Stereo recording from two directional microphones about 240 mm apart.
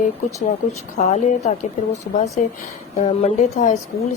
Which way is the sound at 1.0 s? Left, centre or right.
Left.